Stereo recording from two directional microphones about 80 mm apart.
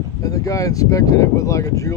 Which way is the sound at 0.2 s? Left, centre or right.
Left.